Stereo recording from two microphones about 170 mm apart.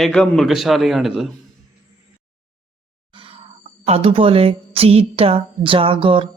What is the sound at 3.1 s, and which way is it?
Speech, 35° right (ahead or behind).